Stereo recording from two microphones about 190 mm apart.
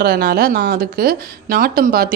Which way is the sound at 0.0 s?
55° right (ahead or behind).